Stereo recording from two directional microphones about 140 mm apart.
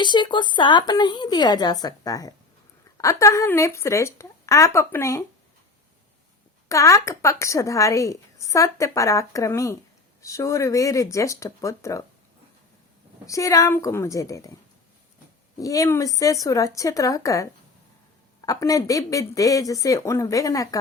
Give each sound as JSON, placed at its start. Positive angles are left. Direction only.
{"t": 0.0, "sound": "a woman's voice", "side_deg": 35}
{"t": 6.7, "sound": "a woman's voice", "side_deg": 20}
{"t": 13.2, "sound": "a woman's voice", "side_deg": 25}
{"t": 15.5, "sound": "a woman's voice", "side_deg": 25}